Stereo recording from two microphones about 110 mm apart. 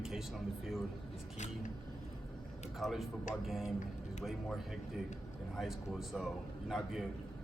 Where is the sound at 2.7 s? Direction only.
Centre (ahead or behind).